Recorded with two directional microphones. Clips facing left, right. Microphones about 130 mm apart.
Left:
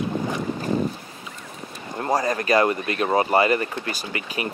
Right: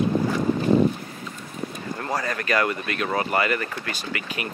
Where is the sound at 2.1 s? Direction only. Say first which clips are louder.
Left 5 dB; 40° left (ahead or behind).